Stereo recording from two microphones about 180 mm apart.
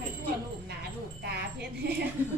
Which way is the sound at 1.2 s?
65° right (ahead or behind).